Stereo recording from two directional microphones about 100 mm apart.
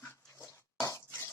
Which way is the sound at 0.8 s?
30° left (ahead or behind).